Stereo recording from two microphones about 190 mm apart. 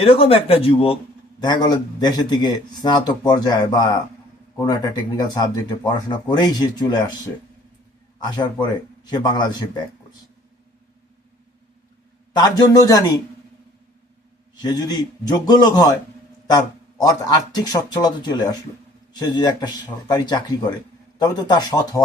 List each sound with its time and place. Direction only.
0.0 s speech: 30° left (ahead or behind)
8.2 s speech: 25° left (ahead or behind)
12.3 s speech: 20° left (ahead or behind)
14.5 s speech: 20° left (ahead or behind)